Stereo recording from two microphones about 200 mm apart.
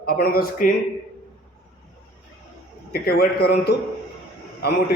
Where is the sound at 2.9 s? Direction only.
50° left (ahead or behind).